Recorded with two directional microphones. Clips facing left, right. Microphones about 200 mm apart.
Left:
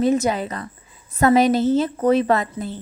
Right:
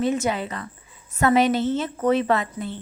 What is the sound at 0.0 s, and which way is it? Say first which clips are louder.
A woman's voice: left 4 dB; 40° left (ahead or behind).